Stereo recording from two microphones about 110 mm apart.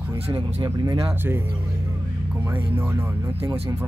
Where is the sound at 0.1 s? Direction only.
30° right (ahead or behind).